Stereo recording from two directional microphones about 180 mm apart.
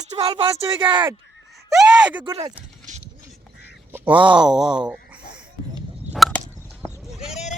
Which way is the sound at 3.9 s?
10° right (ahead or behind).